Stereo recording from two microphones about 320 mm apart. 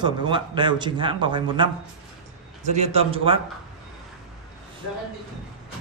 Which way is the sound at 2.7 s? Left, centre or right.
Centre.